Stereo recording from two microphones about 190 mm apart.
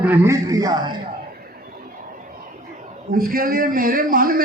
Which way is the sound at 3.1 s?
50° right (ahead or behind).